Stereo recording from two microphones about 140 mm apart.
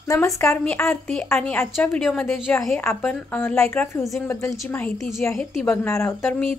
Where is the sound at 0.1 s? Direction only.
20° left (ahead or behind).